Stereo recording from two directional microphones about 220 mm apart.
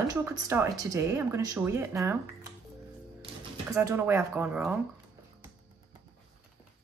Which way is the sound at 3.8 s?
10° right (ahead or behind).